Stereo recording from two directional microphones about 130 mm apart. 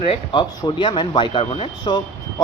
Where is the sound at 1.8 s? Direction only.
30° left (ahead or behind).